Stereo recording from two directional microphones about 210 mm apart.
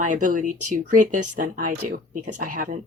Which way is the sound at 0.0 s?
35° right (ahead or behind).